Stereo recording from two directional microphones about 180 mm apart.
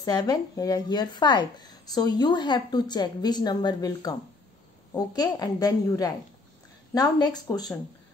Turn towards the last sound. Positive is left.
turn(degrees=20)  # may be behind; listen again after turning